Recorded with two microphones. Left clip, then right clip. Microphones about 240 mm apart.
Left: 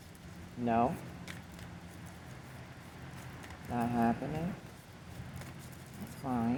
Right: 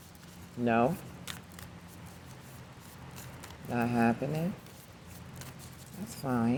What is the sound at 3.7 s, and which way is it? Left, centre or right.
Speech, right.